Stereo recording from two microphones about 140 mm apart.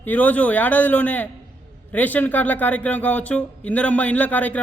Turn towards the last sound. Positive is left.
turn(degrees=10)  # may be behind; listen again after turning